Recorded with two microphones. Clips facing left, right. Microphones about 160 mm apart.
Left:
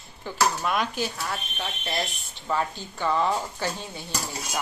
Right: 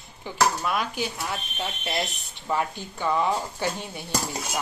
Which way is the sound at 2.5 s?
15° right (ahead or behind).